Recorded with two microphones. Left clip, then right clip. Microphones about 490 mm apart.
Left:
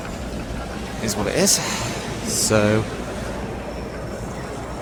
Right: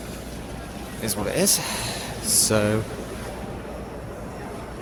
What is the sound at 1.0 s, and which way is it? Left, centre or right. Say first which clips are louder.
Speech: left 3 dB; right.